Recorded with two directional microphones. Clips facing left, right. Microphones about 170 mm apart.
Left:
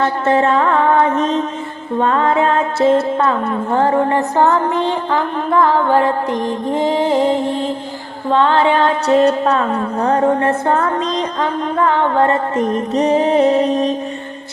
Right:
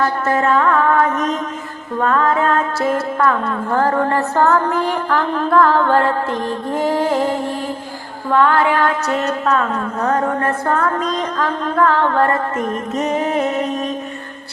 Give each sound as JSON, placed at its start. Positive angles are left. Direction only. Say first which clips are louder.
{"t": 0.0, "sound": "music", "louder": "left 3 dB", "side_deg": 25}
{"t": 12.5, "sound": "music", "louder": "left 5 dB", "side_deg": 35}